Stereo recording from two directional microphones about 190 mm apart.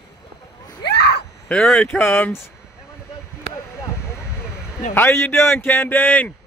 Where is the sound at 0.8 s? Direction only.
60° left (ahead or behind).